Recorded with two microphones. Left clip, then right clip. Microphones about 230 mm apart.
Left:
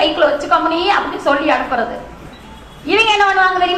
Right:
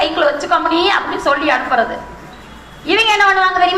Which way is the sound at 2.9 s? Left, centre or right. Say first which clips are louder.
Right 1 dB; right.